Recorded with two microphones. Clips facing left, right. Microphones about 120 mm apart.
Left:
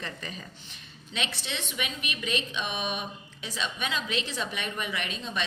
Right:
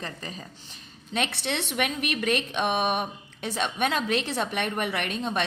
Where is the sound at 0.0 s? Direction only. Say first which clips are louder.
Right 2 dB; 35° right (ahead or behind).